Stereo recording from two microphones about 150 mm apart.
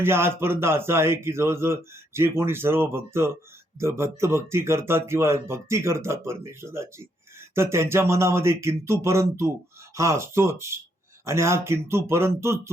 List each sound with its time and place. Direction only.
0.0 s speech: 15° right (ahead or behind)